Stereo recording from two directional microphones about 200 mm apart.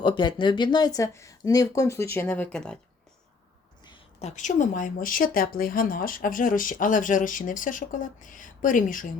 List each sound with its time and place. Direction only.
0.0 s speech: 25° left (ahead or behind); by 2.7 s 5° left (ahead or behind)
3.8 s speech: 30° left (ahead or behind)